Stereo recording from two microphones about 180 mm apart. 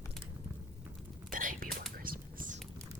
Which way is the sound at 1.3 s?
50° right (ahead or behind).